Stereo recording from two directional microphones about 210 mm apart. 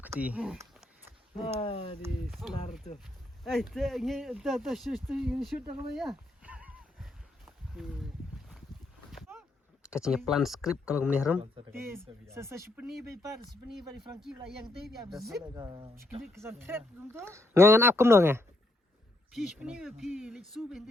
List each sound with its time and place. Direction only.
0.0 s speech: 5° right (ahead or behind)
1.5 s speech: 25° left (ahead or behind)
2.4 s speech: 5° right (ahead or behind)
5.0 s a sound: 5° right (ahead or behind)
9.8 s a man's voice: 5° right (ahead or behind)
15.5 s speech: 20° right (ahead or behind)
16.4 s a man's voice: 10° right (ahead or behind)
19.3 s speech: centre (ahead or behind)